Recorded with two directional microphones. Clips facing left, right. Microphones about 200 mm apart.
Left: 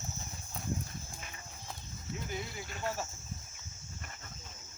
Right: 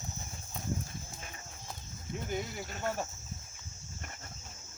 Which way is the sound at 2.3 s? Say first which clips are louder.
Right 6 dB; 50° right (ahead or behind).